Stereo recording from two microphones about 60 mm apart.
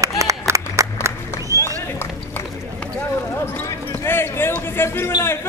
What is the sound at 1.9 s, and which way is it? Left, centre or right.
Run, left.